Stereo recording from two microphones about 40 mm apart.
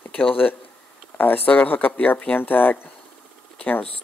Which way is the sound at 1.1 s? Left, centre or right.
Left.